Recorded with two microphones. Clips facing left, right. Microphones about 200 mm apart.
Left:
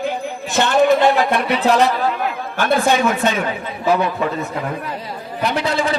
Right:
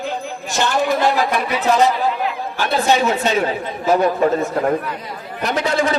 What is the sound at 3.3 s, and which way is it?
A man's voice, 35° right (ahead or behind).